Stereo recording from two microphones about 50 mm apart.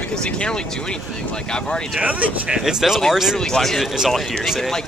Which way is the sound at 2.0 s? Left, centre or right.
Right.